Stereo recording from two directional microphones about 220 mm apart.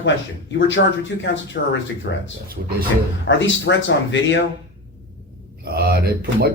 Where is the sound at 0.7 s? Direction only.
55° left (ahead or behind).